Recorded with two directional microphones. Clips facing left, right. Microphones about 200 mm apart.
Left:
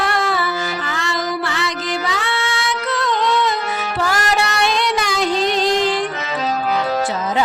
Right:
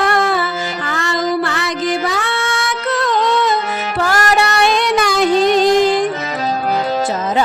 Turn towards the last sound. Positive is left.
turn(degrees=-45)  # may be behind; listen again after turning